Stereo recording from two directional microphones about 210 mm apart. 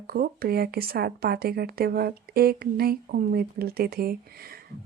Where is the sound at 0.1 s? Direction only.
45° right (ahead or behind).